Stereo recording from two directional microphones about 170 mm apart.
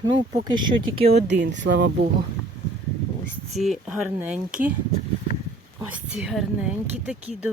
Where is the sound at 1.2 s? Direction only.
90° right.